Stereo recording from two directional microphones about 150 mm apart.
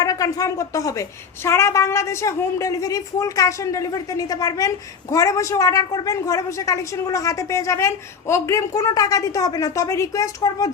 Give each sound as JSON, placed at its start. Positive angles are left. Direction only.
{"t": 0.0, "sound": "a woman's voice", "side_deg": 25}